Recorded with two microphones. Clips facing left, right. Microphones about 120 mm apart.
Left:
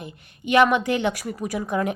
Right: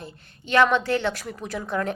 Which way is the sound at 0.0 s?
15° left (ahead or behind).